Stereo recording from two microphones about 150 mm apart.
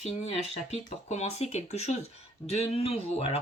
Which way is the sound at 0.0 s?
45° left (ahead or behind).